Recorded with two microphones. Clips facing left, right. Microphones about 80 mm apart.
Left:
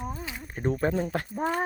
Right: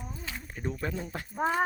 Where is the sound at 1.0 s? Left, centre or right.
Left.